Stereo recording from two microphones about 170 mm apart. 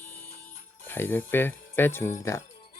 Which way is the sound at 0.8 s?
10° left (ahead or behind).